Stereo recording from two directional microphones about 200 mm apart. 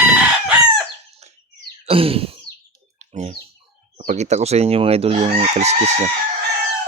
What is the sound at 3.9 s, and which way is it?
Chicken, 35° right (ahead or behind).